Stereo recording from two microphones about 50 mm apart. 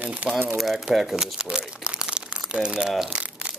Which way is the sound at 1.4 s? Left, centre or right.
Right.